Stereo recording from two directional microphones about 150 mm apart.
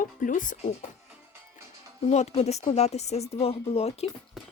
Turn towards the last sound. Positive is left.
turn(degrees=-5)  # may be behind; listen again after turning